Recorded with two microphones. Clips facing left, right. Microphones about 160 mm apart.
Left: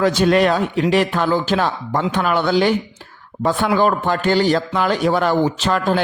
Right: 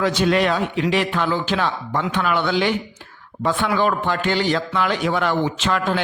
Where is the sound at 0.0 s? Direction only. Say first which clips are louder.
Left 4 dB; 45° left (ahead or behind).